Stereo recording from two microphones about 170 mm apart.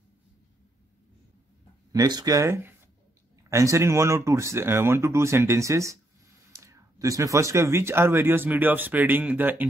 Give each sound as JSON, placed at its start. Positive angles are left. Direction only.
{"t": 1.9, "sound": "speech", "side_deg": -20}